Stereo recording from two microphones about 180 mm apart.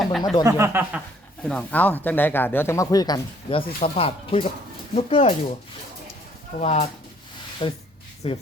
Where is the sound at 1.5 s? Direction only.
5° left (ahead or behind); by 5.3 s 35° left (ahead or behind).